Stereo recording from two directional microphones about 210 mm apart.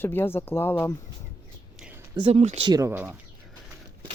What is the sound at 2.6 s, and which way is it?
Speech, 15° right (ahead or behind).